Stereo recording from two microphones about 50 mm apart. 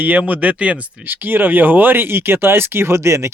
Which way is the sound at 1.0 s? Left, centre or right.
Right.